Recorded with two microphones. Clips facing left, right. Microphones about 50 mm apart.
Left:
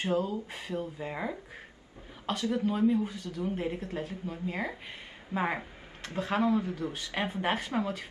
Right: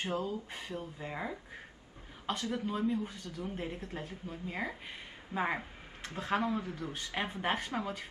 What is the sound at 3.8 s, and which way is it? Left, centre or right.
Speech, left.